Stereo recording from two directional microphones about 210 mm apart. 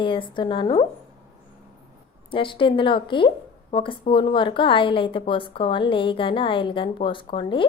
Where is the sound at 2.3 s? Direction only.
25° left (ahead or behind).